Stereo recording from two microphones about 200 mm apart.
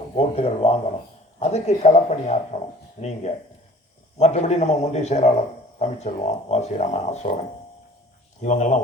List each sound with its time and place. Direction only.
0.2 s speech: 30° left (ahead or behind)
8.4 s speech: 35° left (ahead or behind)